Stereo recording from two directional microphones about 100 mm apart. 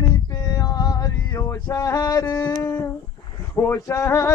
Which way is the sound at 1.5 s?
40° left (ahead or behind).